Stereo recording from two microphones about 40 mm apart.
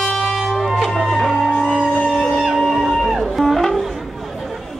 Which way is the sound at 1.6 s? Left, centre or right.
Right.